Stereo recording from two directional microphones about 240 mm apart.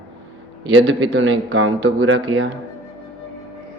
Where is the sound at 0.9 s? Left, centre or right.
Right.